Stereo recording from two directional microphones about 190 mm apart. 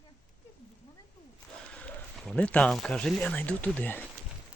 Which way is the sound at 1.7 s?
5° left (ahead or behind).